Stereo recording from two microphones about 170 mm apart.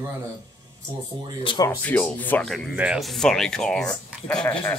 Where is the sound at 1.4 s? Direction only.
30° left (ahead or behind).